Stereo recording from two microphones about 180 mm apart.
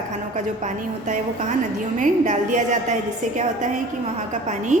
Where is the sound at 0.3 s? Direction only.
40° right (ahead or behind).